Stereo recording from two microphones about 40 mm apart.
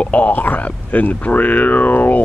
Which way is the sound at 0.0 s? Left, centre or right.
Left.